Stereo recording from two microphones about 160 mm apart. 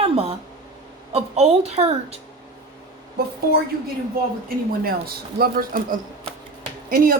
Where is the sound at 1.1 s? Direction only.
40° right (ahead or behind).